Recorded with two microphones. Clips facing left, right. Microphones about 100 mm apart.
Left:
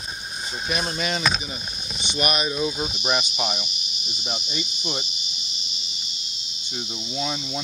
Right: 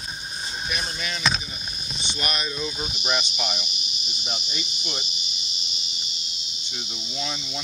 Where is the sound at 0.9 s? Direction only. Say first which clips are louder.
Left 6 dB; 35° left (ahead or behind).